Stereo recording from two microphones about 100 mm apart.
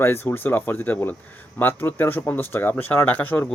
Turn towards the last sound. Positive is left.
turn(degrees=20)  # may be behind; listen again after turning